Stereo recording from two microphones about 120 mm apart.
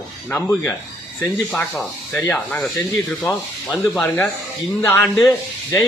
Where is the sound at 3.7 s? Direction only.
Centre (ahead or behind).